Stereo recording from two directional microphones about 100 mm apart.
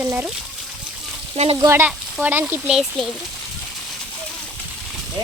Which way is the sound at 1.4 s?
90° right.